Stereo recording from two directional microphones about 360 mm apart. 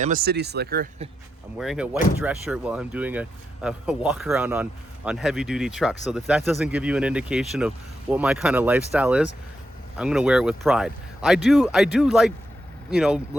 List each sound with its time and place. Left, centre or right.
0.0 s speech: right
1.5 s speech: centre